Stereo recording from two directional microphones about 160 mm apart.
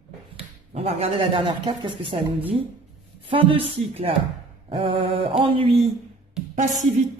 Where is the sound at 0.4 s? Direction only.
40° right (ahead or behind).